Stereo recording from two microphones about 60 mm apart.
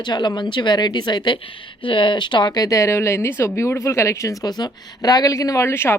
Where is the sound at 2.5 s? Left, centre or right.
Left.